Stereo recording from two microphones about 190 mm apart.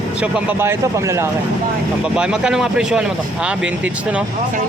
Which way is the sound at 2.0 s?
5° right (ahead or behind).